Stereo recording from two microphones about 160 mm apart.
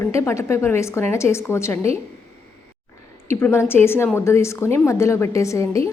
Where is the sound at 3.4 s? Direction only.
15° left (ahead or behind).